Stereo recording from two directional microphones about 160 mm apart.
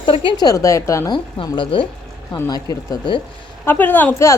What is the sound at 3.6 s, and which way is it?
Speech, 10° left (ahead or behind).